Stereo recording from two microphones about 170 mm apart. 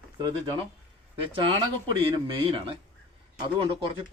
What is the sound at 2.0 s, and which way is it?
Speech, 30° right (ahead or behind).